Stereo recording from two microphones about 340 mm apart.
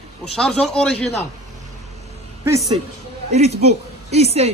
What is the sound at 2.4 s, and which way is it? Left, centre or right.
A woman's voice, centre.